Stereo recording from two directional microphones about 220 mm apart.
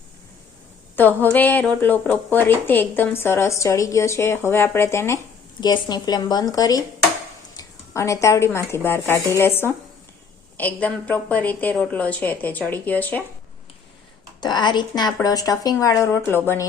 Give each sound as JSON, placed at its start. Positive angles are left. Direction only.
{"t": 0.9, "sound": "speech", "side_deg": 10}
{"t": 14.4, "sound": "speech", "side_deg": 20}